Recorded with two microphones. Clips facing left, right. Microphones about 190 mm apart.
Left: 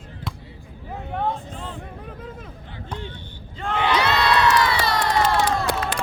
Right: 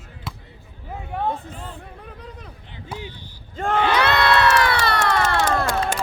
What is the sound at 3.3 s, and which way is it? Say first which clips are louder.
Battle cry: right 5 dB; 45° right (ahead or behind).